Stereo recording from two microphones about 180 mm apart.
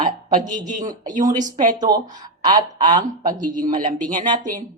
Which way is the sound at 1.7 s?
20° right (ahead or behind).